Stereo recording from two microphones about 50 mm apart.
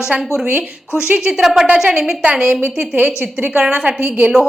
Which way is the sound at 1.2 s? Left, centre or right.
Centre.